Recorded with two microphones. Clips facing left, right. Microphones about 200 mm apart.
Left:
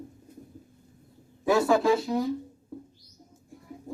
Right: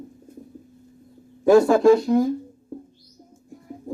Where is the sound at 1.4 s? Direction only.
50° right (ahead or behind).